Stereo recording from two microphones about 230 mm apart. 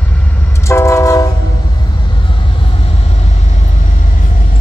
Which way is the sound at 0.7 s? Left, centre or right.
Centre.